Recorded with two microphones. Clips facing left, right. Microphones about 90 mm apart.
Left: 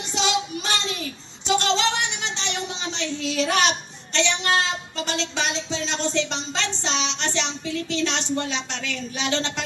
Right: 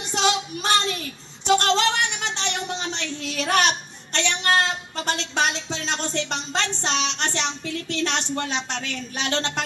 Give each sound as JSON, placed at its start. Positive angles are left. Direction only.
{"t": 0.1, "sound": "speech", "side_deg": -50}